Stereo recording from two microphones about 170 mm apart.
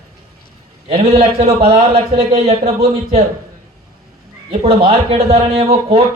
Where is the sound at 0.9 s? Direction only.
35° right (ahead or behind).